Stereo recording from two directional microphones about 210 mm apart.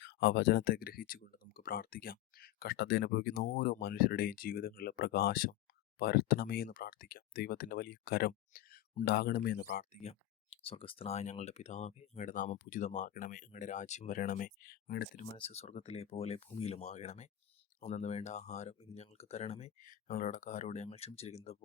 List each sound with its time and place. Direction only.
0.0 s speech: 50° left (ahead or behind)
15.4 s speech: 30° left (ahead or behind)